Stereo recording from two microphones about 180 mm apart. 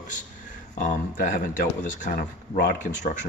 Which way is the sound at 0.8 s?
45° left (ahead or behind).